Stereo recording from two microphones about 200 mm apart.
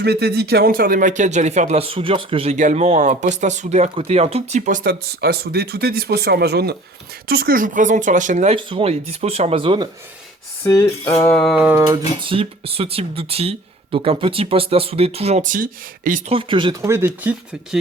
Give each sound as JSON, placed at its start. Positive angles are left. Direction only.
{"t": 0.0, "sound": "speech", "side_deg": -55}
{"t": 10.6, "sound": "cutlery", "side_deg": 15}
{"t": 11.3, "sound": "a sound", "side_deg": 0}
{"t": 11.9, "sound": "speech", "side_deg": -25}
{"t": 16.3, "sound": "speech", "side_deg": -25}